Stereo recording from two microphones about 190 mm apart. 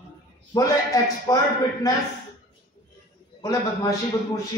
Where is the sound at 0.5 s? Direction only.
20° left (ahead or behind).